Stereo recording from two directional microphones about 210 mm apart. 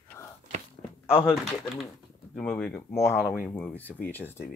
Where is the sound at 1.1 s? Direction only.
25° left (ahead or behind).